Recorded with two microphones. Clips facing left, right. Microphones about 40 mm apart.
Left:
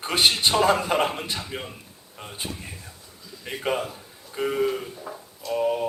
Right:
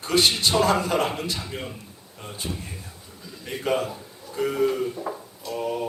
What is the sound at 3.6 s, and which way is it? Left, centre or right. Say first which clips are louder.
A man's voice: right 2 dB; centre.